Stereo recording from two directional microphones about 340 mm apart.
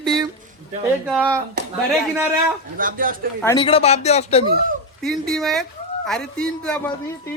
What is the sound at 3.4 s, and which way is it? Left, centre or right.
Speech, centre.